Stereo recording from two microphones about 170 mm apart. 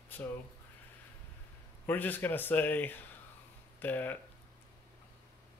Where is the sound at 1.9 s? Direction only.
10° left (ahead or behind).